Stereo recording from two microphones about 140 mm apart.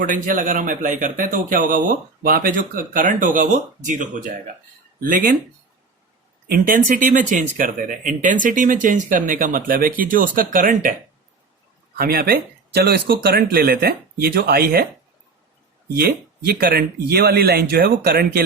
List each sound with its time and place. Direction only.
0.0 s speech: 75° right (ahead or behind)
4.9 s speech: 85° right
6.5 s speech: 75° right (ahead or behind)
11.9 s speech: 90° right
16.0 s speech: 90° right